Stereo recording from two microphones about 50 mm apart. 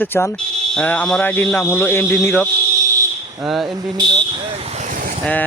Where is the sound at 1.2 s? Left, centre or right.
Left.